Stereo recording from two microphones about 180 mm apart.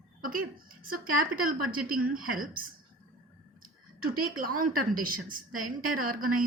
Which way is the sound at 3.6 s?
50° right (ahead or behind).